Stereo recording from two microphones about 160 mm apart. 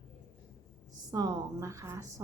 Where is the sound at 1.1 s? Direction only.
25° right (ahead or behind).